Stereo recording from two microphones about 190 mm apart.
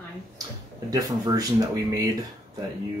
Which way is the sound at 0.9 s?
20° right (ahead or behind).